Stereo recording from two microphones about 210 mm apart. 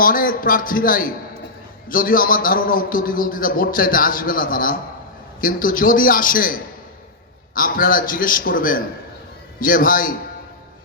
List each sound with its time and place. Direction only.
0.0 s a man's voice: 40° left (ahead or behind)